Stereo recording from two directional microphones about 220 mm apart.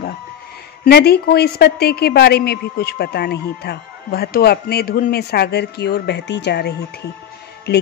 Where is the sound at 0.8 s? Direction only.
45° left (ahead or behind).